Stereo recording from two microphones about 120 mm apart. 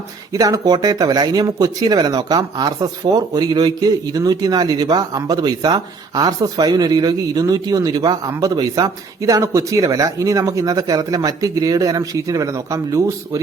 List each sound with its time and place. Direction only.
0.3 s speech: 30° right (ahead or behind)